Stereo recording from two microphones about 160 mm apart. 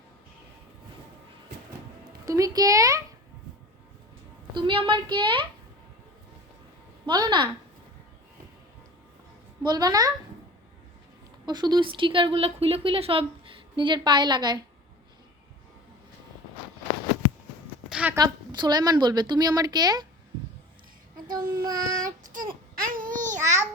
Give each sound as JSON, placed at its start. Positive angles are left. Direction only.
{"t": 2.2, "sound": "a woman's voice", "side_deg": -20}
{"t": 4.5, "sound": "speech", "side_deg": -30}
{"t": 7.0, "sound": "a woman's voice", "side_deg": -25}
{"t": 9.6, "sound": "a woman's voice", "side_deg": -25}
{"t": 11.4, "sound": "speech", "side_deg": -25}
{"t": 17.8, "sound": "a sound", "side_deg": -5}
{"t": 18.1, "sound": "a woman's voice", "side_deg": -25}
{"t": 21.2, "sound": "a woman's voice", "side_deg": -25}
{"t": 22.0, "sound": "child singing", "side_deg": -55}
{"t": 22.9, "sound": "babbling", "side_deg": -60}